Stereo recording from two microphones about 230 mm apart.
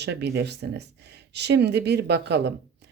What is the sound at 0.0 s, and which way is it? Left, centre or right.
Speech, right.